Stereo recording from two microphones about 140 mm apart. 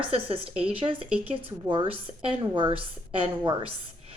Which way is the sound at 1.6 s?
35° right (ahead or behind).